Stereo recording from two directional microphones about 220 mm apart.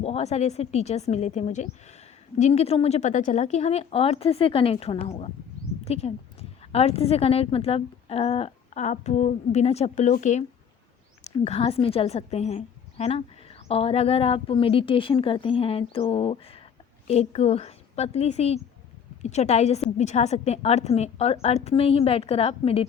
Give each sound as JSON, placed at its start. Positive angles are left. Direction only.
{"t": 0.0, "sound": "a woman's voice", "side_deg": 30}